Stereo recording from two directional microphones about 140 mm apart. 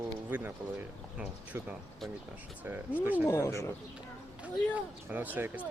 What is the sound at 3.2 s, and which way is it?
Speech, 20° left (ahead or behind).